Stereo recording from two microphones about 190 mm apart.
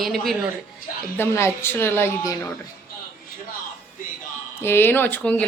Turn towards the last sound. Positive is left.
turn(degrees=10)  # may be behind; listen again after turning